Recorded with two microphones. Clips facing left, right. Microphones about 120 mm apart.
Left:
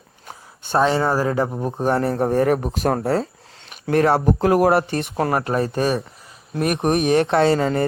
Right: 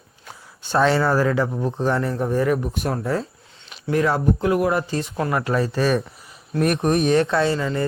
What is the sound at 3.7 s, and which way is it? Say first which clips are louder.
Speech: left 3 dB; 55° left (ahead or behind).